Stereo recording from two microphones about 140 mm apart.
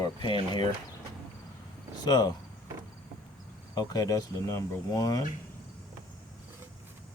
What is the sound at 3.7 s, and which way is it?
Speech, 25° left (ahead or behind).